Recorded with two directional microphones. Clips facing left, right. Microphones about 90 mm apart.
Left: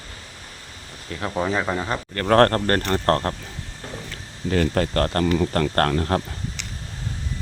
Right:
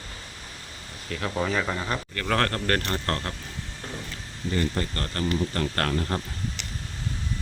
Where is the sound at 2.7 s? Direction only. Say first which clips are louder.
Left 6 dB; 35° left (ahead or behind).